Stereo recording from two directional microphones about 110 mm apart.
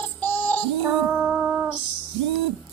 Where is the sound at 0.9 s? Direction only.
10° right (ahead or behind).